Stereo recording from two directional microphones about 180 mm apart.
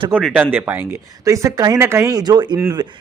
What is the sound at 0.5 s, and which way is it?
Speech, 10° right (ahead or behind).